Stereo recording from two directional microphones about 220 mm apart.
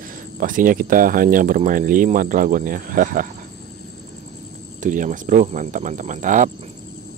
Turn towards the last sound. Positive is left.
turn(degrees=-35)  # may be behind; listen again after turning